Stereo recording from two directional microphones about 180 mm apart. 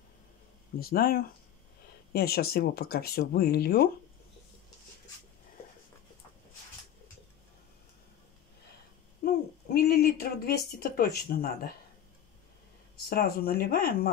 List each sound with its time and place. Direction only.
0.7 s speech: 55° left (ahead or behind)
9.8 s speech: 60° left (ahead or behind)
13.1 s speech: 55° left (ahead or behind)